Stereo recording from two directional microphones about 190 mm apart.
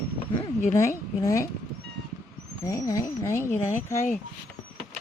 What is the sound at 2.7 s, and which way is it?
Speech, 20° left (ahead or behind).